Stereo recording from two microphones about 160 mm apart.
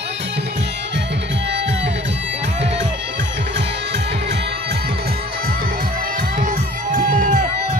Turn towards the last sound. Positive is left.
turn(degrees=-55)  # may be behind; listen again after turning